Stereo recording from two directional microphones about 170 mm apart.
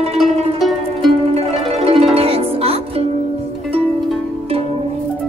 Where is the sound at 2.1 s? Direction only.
35° right (ahead or behind).